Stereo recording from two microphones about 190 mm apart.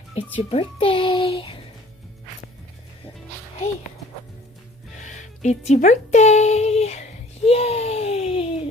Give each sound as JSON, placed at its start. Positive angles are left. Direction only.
{"t": 0.1, "sound": "a child's voice", "side_deg": 30}
{"t": 4.9, "sound": "music", "side_deg": 40}